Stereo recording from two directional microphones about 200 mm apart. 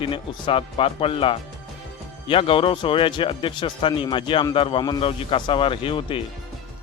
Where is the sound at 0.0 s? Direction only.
25° left (ahead or behind).